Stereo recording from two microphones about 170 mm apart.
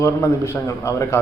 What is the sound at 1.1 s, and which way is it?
Speech, 15° left (ahead or behind).